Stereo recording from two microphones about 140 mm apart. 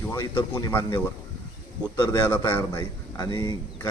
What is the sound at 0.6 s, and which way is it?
Speech, 20° left (ahead or behind).